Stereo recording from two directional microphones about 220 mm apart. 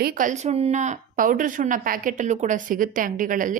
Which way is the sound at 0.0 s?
40° right (ahead or behind).